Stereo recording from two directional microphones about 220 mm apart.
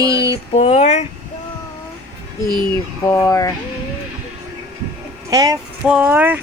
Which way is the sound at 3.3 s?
15° left (ahead or behind).